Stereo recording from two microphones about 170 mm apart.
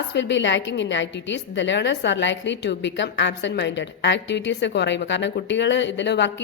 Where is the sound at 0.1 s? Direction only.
90° left.